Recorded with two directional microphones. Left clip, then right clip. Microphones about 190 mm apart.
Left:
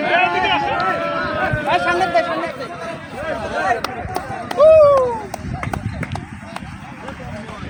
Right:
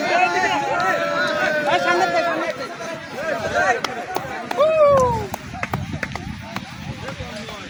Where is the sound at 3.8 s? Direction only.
20° left (ahead or behind).